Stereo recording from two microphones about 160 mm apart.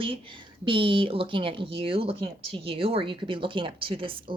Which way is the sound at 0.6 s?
30° right (ahead or behind).